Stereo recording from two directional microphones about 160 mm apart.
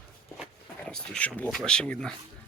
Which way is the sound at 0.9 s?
5° left (ahead or behind).